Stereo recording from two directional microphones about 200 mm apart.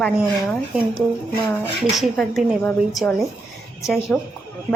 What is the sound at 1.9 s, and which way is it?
Speech, centre (ahead or behind).